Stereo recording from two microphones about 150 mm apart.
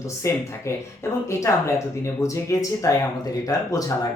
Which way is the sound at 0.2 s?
20° left (ahead or behind).